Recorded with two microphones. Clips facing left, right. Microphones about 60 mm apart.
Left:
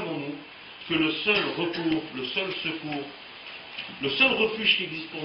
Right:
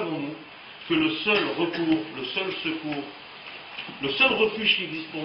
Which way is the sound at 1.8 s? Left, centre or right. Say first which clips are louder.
Right 2 dB; centre.